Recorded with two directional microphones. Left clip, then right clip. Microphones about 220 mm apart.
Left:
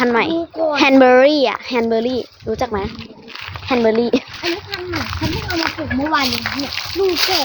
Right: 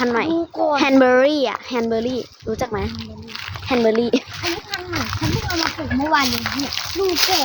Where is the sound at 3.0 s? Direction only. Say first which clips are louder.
Even; 15° right (ahead or behind).